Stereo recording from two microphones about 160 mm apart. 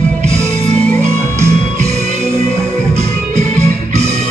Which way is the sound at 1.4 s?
45° right (ahead or behind).